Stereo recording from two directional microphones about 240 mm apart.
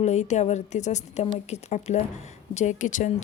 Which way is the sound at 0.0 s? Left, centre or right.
Left.